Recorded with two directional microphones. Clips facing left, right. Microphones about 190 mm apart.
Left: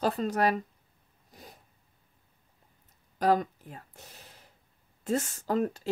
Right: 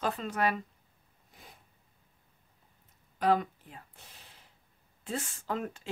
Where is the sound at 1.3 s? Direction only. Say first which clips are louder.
Left 5 dB; 40° left (ahead or behind).